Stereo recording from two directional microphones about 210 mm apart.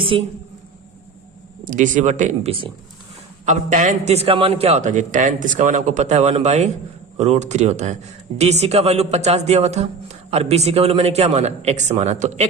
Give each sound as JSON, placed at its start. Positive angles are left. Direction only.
{"t": 0.1, "sound": "a woman's voice", "side_deg": -25}
{"t": 1.6, "sound": "a man's voice", "side_deg": -35}